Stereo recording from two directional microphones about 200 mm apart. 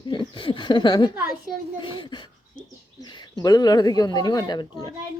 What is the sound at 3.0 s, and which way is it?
Bird, 20° left (ahead or behind).